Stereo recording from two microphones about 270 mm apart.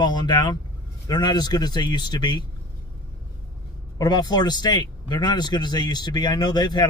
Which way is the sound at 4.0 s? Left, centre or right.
Centre.